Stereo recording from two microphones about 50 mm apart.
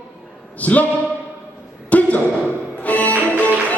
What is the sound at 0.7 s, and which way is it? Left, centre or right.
Speech, left.